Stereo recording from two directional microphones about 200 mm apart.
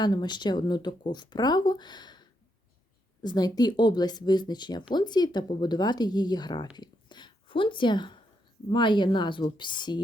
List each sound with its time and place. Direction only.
0.0 s speech: 20° left (ahead or behind)
3.2 s speech: 20° left (ahead or behind)
6.7 s a sound: 20° left (ahead or behind)
8.7 s speech: 25° left (ahead or behind)